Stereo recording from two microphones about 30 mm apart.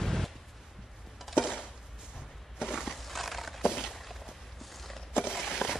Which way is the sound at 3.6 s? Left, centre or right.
Centre.